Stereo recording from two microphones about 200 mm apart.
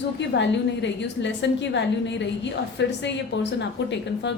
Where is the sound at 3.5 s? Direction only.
60° left (ahead or behind).